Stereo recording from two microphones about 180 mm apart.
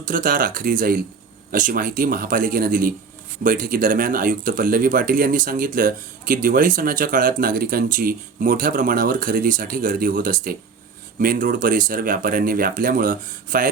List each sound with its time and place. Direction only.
0.0 s speech: 50° right (ahead or behind)